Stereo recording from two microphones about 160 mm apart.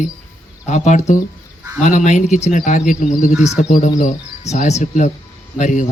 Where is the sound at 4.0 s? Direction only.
45° left (ahead or behind).